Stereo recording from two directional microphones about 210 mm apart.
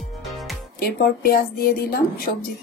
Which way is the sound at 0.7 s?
45° left (ahead or behind).